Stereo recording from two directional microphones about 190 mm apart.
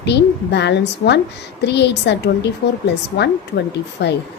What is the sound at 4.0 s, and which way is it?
Speech, 65° left (ahead or behind).